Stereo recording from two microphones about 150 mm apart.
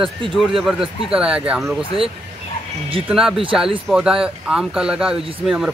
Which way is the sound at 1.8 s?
40° right (ahead or behind).